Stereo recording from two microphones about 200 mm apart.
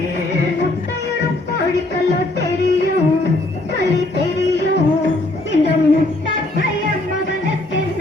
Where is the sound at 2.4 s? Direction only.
60° left (ahead or behind).